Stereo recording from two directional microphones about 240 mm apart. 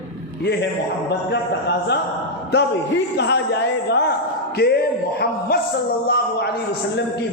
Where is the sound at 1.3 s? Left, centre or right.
Left.